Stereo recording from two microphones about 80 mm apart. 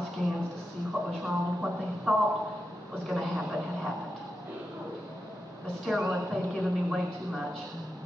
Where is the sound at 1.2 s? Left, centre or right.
Centre.